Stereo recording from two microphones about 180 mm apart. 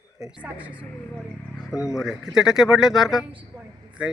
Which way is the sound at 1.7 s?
15° left (ahead or behind).